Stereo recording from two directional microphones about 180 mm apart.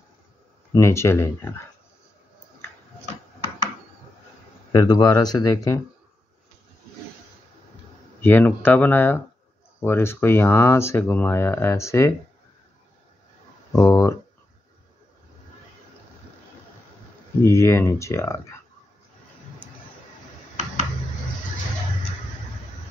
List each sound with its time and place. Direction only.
0.7 s speech: 15° left (ahead or behind)
4.7 s speech: 20° left (ahead or behind)
8.2 s speech: 10° left (ahead or behind)
13.7 s speech: 15° left (ahead or behind)
17.4 s speech: 15° left (ahead or behind)